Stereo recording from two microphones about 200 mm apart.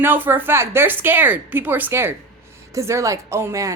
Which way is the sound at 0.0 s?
10° right (ahead or behind).